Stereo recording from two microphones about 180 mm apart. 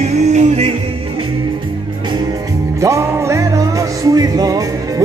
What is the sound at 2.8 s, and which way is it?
Music, 15° right (ahead or behind).